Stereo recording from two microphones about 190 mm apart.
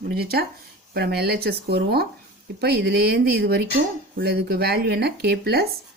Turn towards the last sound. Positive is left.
turn(degrees=-55)  # may be behind; listen again after turning